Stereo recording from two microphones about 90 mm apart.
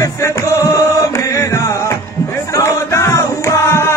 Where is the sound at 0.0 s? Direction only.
35° left (ahead or behind).